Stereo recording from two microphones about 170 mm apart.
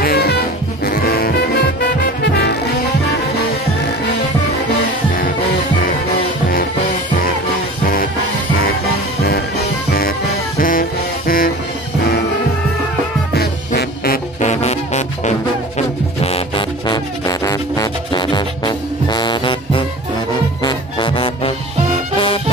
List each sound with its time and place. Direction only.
0.0 s music: 70° left (ahead or behind)
9.2 s music: 65° left (ahead or behind)
13.7 s music: 60° left (ahead or behind)
14.4 s music: 40° left (ahead or behind)
16.3 s music: 30° left (ahead or behind)